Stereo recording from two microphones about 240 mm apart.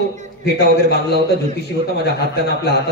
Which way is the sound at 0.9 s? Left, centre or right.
Left.